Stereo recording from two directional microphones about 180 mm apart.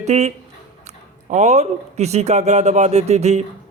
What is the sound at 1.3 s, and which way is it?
A man's voice, 40° right (ahead or behind).